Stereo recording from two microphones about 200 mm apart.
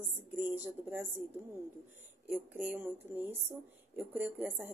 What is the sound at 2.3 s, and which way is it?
A woman's voice, 5° right (ahead or behind).